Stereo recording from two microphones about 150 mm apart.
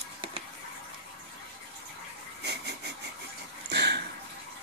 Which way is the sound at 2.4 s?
90° right.